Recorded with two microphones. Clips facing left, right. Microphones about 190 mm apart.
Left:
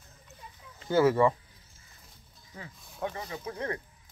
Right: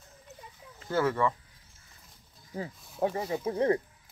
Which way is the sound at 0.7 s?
Centre (ahead or behind).